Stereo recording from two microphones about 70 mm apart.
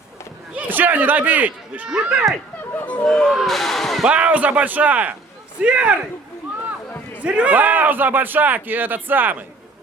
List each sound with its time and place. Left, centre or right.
0.5 s a man's voice: right
2.7 s speech: left
3.0 s speech: centre
4.0 s a man's voice: centre
7.2 s a man's voice: centre